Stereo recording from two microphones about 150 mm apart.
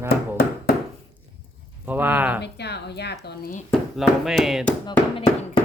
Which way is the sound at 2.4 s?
90° left.